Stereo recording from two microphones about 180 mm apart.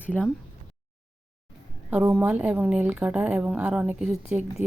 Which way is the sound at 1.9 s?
10° right (ahead or behind).